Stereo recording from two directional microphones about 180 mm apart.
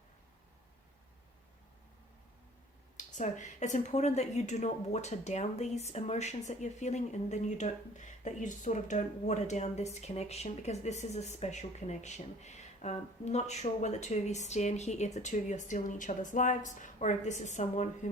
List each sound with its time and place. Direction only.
3.0 s a woman's voice: 45° left (ahead or behind)